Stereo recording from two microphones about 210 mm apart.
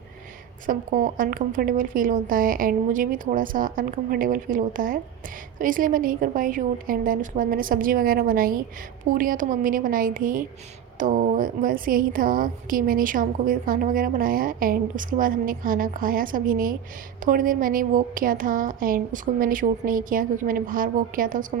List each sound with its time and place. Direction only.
0.7 s a woman's voice: 40° right (ahead or behind)